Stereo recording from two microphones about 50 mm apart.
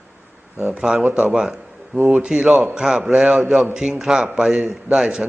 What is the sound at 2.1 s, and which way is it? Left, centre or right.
Speech, right.